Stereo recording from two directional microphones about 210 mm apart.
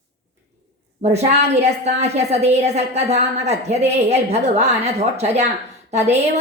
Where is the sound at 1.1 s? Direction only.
30° right (ahead or behind).